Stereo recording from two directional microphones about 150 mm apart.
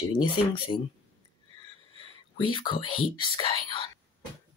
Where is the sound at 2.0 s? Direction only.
35° left (ahead or behind).